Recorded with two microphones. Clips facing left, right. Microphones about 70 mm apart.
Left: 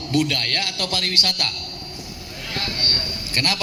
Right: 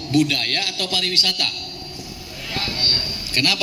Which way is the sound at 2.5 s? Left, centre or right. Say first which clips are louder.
Right 1 dB; left.